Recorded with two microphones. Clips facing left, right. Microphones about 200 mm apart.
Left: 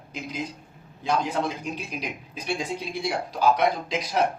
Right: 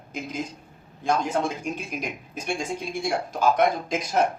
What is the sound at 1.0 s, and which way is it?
Speech, 50° right (ahead or behind).